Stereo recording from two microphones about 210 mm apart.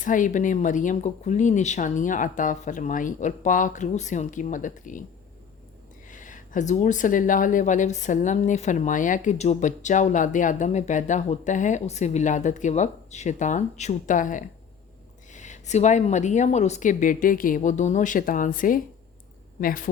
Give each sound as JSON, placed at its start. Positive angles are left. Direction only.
{"t": 0.0, "sound": "speech", "side_deg": 40}
{"t": 6.1, "sound": "speech", "side_deg": 40}